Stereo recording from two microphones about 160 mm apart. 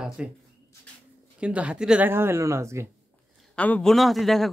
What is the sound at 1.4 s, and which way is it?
Speech, 5° right (ahead or behind).